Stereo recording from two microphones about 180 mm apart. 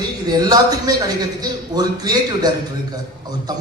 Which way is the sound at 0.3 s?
20° right (ahead or behind).